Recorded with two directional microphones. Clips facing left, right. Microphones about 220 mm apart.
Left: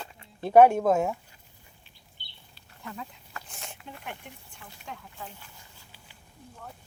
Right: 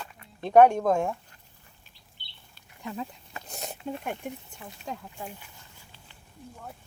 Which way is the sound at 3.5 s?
40° right (ahead or behind).